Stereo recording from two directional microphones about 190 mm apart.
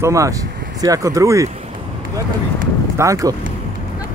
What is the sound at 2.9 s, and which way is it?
Speech, 15° right (ahead or behind).